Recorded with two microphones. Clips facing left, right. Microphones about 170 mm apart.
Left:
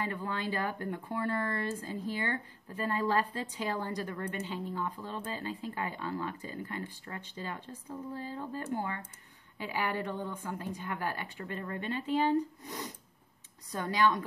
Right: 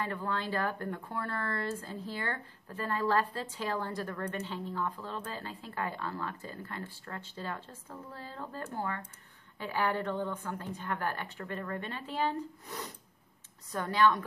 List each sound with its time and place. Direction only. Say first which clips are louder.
0.0 s speech: even; 15° left (ahead or behind)